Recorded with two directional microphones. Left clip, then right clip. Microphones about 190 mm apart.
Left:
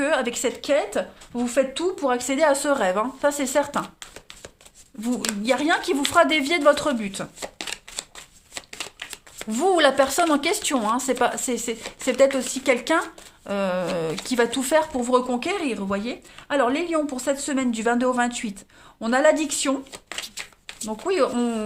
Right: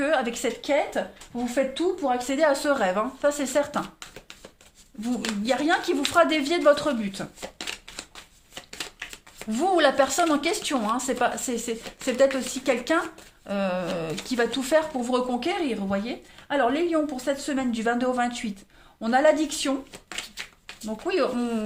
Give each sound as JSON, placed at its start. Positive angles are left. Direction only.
{"t": 0.0, "sound": "speech", "side_deg": 45}
{"t": 5.0, "sound": "speech", "side_deg": 35}
{"t": 9.4, "sound": "a woman's voice", "side_deg": 40}
{"t": 20.4, "sound": "a sound", "side_deg": 35}
{"t": 20.8, "sound": "speech", "side_deg": 40}